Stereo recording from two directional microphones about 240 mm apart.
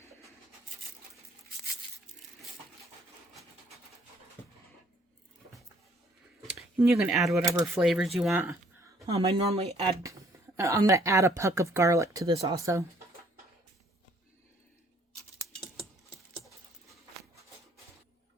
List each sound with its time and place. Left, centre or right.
6.6 s speech: centre
7.4 s speech: centre
7.8 s speech: centre
9.1 s speech: right
10.6 s speech: centre